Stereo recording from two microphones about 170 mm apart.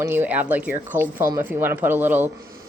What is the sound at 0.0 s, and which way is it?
Speech, 10° right (ahead or behind).